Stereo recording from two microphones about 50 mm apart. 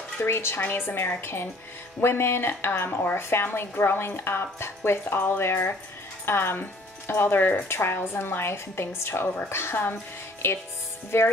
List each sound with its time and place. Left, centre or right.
0.2 s speech: left